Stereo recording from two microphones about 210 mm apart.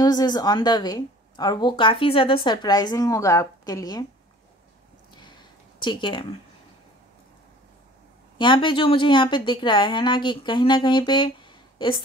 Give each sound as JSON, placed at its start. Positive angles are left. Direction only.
{"t": 0.0, "sound": "a woman's voice", "side_deg": 20}
{"t": 5.1, "sound": "a sound", "side_deg": 20}
{"t": 8.4, "sound": "a woman's voice", "side_deg": 25}